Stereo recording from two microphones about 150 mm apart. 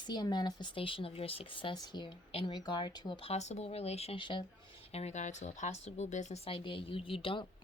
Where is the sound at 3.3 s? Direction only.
45° left (ahead or behind).